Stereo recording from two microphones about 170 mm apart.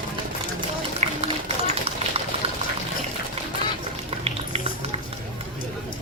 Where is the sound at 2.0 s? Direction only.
40° right (ahead or behind).